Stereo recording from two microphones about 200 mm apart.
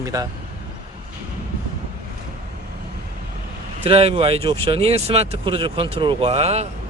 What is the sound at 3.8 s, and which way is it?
Speech, 30° right (ahead or behind).